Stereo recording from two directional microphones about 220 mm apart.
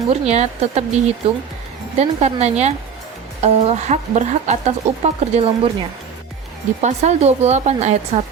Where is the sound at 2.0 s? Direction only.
30° right (ahead or behind).